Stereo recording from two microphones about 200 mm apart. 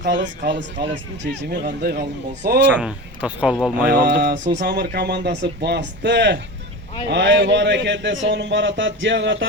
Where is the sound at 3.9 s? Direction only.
55° right (ahead or behind).